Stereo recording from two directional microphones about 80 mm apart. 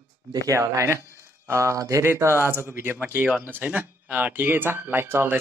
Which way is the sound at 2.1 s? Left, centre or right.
Right.